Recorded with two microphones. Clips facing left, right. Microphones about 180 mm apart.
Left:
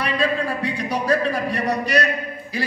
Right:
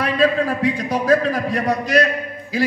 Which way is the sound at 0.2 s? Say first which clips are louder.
Right 8 dB; 90° right.